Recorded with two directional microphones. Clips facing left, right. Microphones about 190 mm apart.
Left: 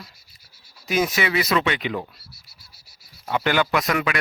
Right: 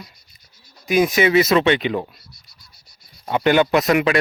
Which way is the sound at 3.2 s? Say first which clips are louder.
Right 6 dB; 20° right (ahead or behind).